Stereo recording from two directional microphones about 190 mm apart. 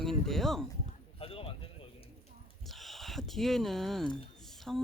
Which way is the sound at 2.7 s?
Centre (ahead or behind).